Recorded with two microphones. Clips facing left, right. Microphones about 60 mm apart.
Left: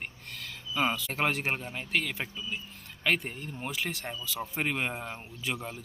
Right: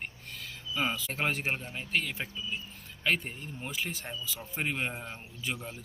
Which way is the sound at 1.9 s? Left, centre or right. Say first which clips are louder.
Left 1 dB; left.